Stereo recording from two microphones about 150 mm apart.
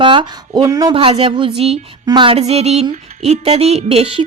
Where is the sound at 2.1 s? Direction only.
35° right (ahead or behind).